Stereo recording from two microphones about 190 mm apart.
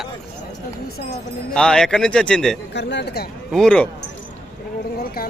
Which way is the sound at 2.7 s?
65° left (ahead or behind).